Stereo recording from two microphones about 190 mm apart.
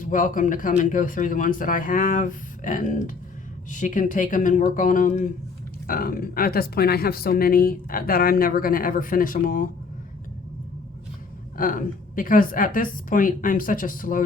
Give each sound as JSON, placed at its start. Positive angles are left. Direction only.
{"t": 0.0, "sound": "speech", "side_deg": 45}
{"t": 11.5, "sound": "speech", "side_deg": 45}